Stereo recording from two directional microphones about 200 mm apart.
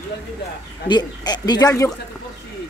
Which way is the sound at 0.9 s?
20° left (ahead or behind).